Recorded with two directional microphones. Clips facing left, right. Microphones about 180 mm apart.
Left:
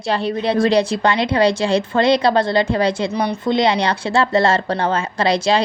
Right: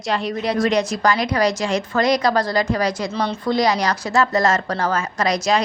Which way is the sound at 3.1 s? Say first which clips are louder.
Left 2 dB; 15° left (ahead or behind).